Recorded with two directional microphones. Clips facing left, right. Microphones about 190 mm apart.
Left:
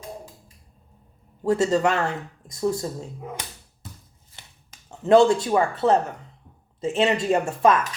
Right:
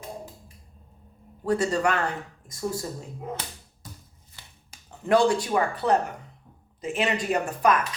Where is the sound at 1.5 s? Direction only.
25° left (ahead or behind).